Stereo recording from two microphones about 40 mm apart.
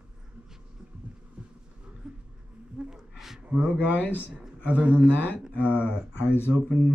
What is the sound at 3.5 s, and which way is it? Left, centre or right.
Speech, right.